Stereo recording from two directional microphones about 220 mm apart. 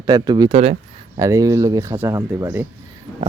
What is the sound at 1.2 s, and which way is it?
Speech, 15° right (ahead or behind).